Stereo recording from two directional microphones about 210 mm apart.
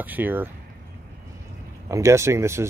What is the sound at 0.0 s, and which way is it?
Speech, 10° right (ahead or behind).